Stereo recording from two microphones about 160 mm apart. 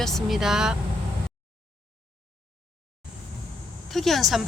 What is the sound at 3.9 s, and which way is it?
Speech, centre (ahead or behind).